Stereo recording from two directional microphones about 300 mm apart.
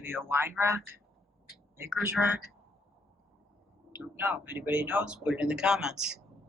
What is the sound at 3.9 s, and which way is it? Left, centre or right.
Speech, centre.